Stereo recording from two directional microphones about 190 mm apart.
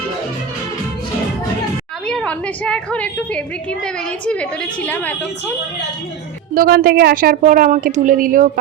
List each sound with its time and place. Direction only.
2.0 s a woman's voice: 5° left (ahead or behind)
6.5 s a woman's voice: 50° right (ahead or behind)